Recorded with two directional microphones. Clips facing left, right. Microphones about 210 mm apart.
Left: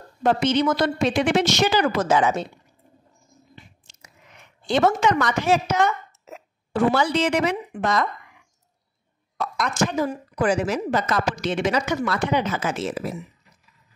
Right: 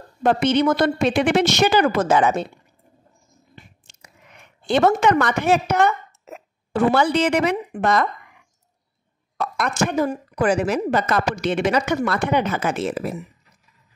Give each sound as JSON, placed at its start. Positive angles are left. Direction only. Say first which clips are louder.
{"t": 0.2, "sound": "a woman's voice", "louder": "right 2 dB", "side_deg": -60}
{"t": 3.5, "sound": "biting", "louder": "right 3 dB", "side_deg": -60}
{"t": 4.6, "sound": "a woman's voice", "louder": "right 3 dB", "side_deg": -60}
{"t": 9.4, "sound": "a woman's voice", "louder": "right 1 dB", "side_deg": -60}